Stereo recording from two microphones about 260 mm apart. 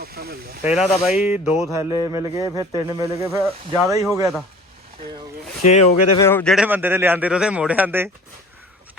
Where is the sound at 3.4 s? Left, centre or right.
Centre.